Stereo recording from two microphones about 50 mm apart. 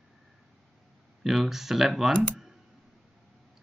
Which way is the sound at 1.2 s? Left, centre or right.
Centre.